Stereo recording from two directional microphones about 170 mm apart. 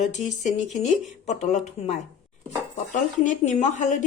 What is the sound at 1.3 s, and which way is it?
Speech, 40° left (ahead or behind).